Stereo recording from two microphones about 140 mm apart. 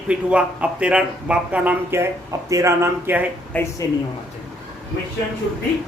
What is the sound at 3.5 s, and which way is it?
Speech, 10° left (ahead or behind).